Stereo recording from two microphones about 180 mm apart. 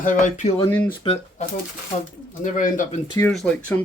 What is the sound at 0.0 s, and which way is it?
Speech, 45° left (ahead or behind).